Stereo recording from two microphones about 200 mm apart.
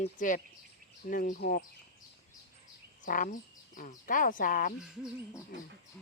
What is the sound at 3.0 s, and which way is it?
Speech, 40° left (ahead or behind).